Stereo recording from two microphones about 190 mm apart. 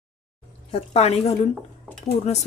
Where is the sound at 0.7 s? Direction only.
30° left (ahead or behind).